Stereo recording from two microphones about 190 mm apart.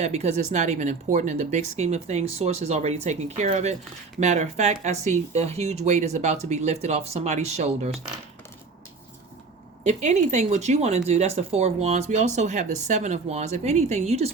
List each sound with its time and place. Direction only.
0.0 s speech: 35° right (ahead or behind)
9.8 s speech: 40° right (ahead or behind)